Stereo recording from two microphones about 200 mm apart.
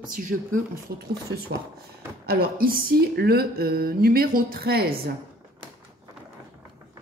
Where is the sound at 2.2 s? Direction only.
45° right (ahead or behind).